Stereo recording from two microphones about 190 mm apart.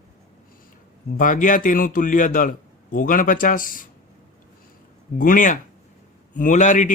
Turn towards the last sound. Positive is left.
turn(degrees=40)  # may be behind; listen again after turning